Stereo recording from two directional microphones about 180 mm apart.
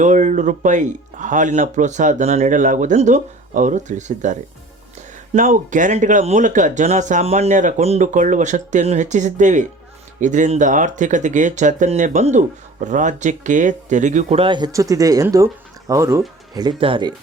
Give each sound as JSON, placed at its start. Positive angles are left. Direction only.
{"t": 0.0, "sound": "speech", "side_deg": -40}